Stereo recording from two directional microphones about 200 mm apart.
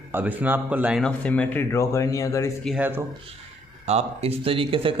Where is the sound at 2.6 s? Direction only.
Centre (ahead or behind).